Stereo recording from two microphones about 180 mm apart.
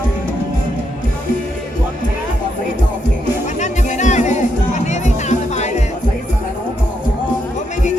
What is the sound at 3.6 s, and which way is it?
Music, 40° left (ahead or behind).